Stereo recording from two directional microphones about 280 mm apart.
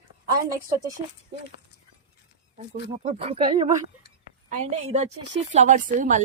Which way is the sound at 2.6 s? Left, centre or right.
Right.